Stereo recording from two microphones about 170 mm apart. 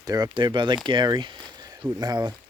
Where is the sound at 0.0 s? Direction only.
20° right (ahead or behind).